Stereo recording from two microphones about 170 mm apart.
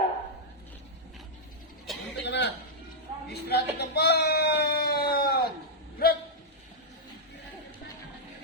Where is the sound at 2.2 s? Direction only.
90° left.